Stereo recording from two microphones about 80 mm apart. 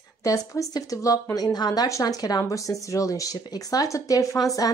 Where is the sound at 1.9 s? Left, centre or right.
Left.